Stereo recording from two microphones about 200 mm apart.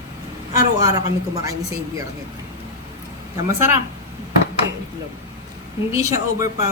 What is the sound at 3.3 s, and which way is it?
Speech, 10° right (ahead or behind).